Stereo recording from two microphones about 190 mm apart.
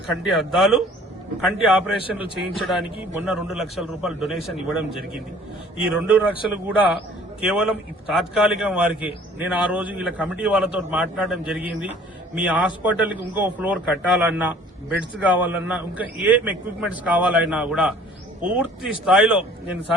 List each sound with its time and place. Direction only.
0.1 s a man's voice: centre (ahead or behind)